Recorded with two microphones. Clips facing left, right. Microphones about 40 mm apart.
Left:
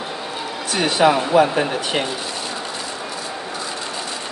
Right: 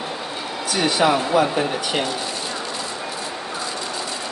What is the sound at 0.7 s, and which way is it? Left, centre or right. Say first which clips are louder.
Speech: left 2 dB; left.